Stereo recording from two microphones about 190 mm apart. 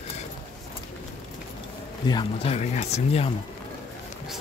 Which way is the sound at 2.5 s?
35° left (ahead or behind).